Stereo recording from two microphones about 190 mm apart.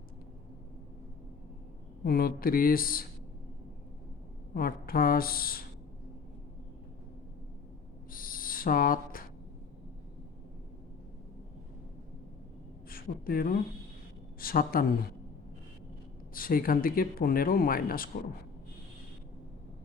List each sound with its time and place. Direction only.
2.0 s speech: 50° left (ahead or behind)
4.5 s speech: 50° left (ahead or behind)
8.1 s owl: 50° left (ahead or behind)
12.9 s a woman's voice: 50° left (ahead or behind)
16.3 s speech: 50° left (ahead or behind)